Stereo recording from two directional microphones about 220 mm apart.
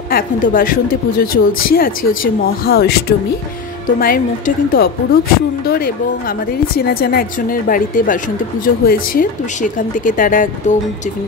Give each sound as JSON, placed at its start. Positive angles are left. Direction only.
{"t": 0.1, "sound": "speech", "side_deg": 40}